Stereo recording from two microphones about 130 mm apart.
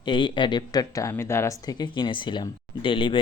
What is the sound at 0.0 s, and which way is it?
Speech, 40° left (ahead or behind).